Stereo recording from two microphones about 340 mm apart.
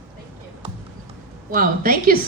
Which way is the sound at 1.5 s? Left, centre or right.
Right.